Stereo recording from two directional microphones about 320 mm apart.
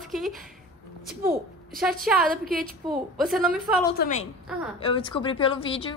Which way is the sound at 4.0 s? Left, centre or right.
Left.